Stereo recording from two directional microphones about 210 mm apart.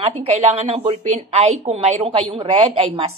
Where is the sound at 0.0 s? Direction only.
30° right (ahead or behind).